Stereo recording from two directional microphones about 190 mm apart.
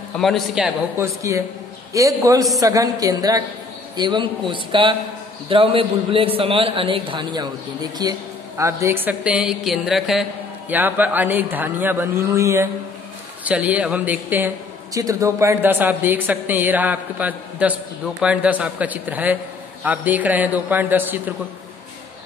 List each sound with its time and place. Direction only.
0.2 s a man's voice: centre (ahead or behind)